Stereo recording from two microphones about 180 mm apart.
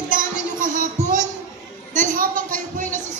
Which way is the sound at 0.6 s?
45° right (ahead or behind).